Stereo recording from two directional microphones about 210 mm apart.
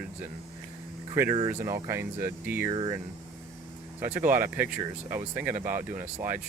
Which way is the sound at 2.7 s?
20° right (ahead or behind).